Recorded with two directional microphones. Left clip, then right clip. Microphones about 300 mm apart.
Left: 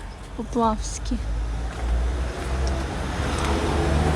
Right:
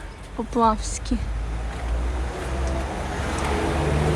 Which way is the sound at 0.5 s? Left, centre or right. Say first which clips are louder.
Right 3 dB; centre.